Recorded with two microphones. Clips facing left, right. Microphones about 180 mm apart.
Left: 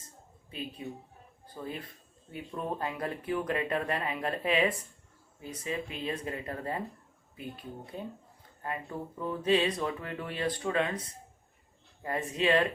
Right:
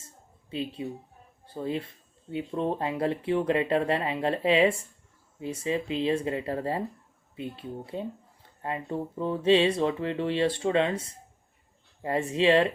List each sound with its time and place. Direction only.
0.5 s speech: 30° right (ahead or behind)